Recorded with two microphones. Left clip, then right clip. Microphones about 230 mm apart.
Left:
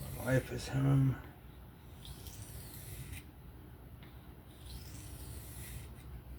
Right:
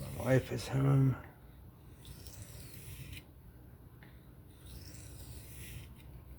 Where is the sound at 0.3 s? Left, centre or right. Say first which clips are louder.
Right 3 dB; right.